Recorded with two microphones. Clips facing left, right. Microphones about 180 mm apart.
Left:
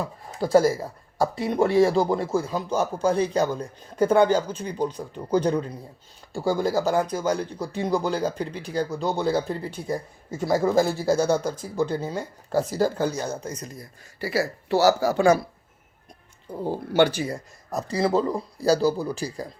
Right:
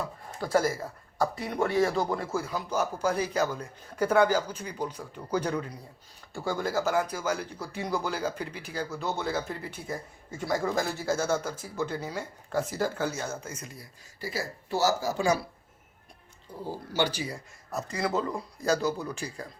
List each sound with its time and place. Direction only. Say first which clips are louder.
0.3 s speech: left 7 dB; 30° left (ahead or behind)
14.2 s speech: left 9 dB; 70° left (ahead or behind); by 15.4 s 55° left (ahead or behind)
16.5 s speech: left 8 dB; 60° left (ahead or behind); by 19.5 s 35° left (ahead or behind)